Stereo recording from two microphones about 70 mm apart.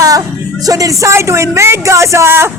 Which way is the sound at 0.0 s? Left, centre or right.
Right.